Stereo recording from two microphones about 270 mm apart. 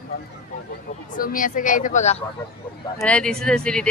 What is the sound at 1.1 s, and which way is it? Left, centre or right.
Speech, left.